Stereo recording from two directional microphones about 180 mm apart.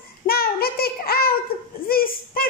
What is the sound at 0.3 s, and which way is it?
Child singing, 60° left (ahead or behind).